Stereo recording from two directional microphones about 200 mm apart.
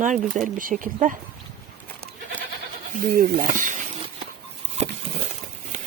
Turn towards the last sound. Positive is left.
turn(degrees=-35)  # may be behind; listen again after turning